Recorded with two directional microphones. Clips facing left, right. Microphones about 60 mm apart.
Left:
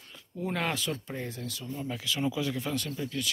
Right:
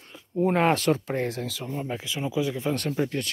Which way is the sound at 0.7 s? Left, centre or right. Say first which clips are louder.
Right 10 dB; right.